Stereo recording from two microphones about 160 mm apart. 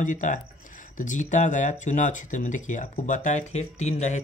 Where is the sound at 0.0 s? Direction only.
55° left (ahead or behind).